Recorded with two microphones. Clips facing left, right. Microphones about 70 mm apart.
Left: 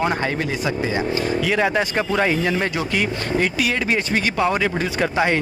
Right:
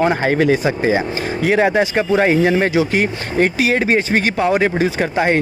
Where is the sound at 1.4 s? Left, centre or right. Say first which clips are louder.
Right 8 dB; right.